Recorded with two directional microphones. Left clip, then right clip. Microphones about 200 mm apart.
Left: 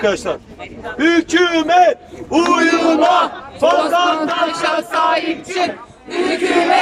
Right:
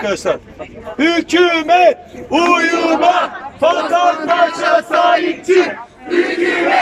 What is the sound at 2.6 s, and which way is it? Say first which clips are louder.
Speech: even; 15° left (ahead or behind).